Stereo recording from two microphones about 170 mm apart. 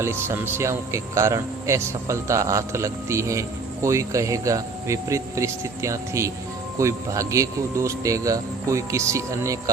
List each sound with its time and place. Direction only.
0.0 s speech: 15° right (ahead or behind)